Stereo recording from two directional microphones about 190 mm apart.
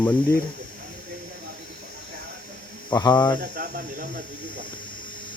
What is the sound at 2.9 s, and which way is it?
Speech, 20° left (ahead or behind).